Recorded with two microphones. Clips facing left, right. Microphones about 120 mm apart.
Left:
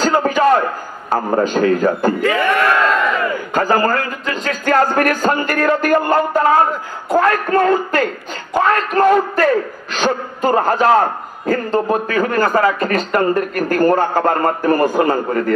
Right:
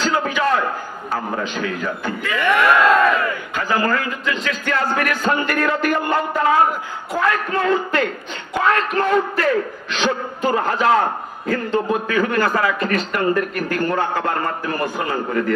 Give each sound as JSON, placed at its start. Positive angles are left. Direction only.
{"t": 0.0, "sound": "a sound", "side_deg": 40}
{"t": 1.1, "sound": "a man's voice", "side_deg": 40}
{"t": 3.5, "sound": "a man's voice", "side_deg": 40}